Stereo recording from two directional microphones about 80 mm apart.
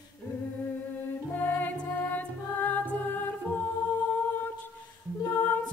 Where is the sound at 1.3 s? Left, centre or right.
Left.